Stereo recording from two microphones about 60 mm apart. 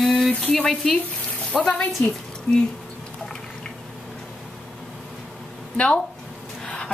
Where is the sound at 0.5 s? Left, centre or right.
Centre.